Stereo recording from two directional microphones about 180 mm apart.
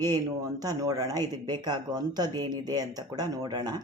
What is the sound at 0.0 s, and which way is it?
Speech, 20° right (ahead or behind).